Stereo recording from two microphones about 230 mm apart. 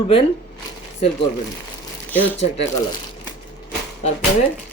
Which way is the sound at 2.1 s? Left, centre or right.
Centre.